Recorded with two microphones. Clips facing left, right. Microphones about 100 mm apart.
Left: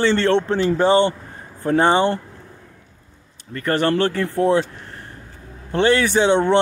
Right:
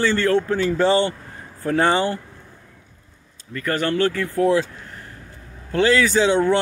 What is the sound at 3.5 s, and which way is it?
Speech, 30° left (ahead or behind).